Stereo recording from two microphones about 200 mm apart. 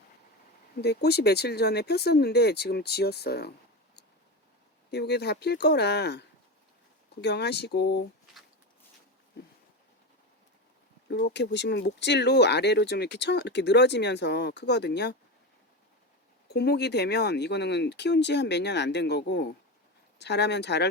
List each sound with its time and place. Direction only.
0.8 s speech: 55° left (ahead or behind)
4.9 s speech: 55° left (ahead or behind)
11.1 s speech: 60° left (ahead or behind)
16.5 s speech: 55° left (ahead or behind)